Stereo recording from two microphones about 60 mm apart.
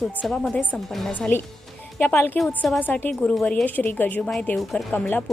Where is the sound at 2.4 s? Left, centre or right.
Left.